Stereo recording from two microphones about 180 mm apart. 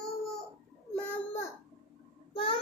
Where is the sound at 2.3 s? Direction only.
30° left (ahead or behind).